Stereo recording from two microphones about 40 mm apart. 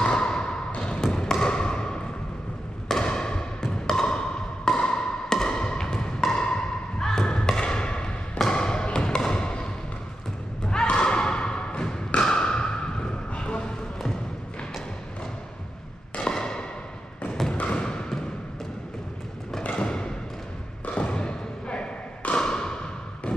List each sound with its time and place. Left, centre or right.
0.0 s thump: centre
0.7 s a sound: left
2.9 s music: left
7.1 s thump: centre
8.5 s music: left
10.7 s thump: left
13.3 s basketball bounce: left
16.2 s a sound: centre
19.8 s thump: left